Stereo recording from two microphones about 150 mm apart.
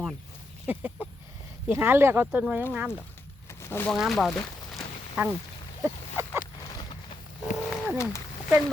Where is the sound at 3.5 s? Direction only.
15° left (ahead or behind).